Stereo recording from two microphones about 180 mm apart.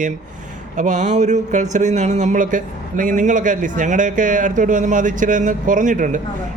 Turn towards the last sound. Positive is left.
turn(degrees=-45)  # may be behind; listen again after turning